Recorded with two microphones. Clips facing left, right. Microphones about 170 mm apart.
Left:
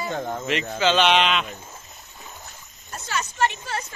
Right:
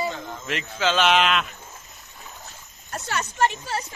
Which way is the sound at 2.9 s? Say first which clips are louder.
Right 1 dB; 60° right (ahead or behind).